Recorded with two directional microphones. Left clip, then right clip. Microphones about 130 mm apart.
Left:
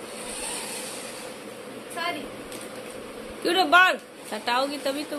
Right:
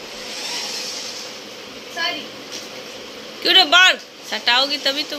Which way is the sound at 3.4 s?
20° left (ahead or behind).